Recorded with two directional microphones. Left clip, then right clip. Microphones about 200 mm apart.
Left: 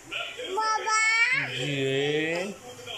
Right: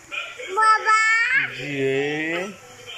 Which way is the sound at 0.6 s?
15° left (ahead or behind).